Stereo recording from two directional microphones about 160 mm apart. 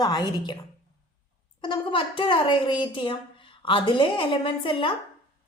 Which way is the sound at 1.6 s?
30° left (ahead or behind).